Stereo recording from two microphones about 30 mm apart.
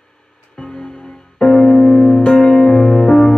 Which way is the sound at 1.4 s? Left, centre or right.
Centre.